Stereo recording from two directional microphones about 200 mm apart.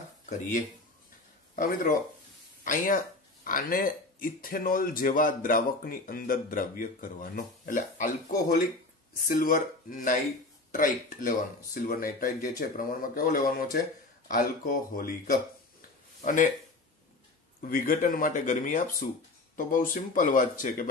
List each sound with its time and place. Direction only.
0.3 s speech: 40° left (ahead or behind)
17.6 s speech: 45° left (ahead or behind)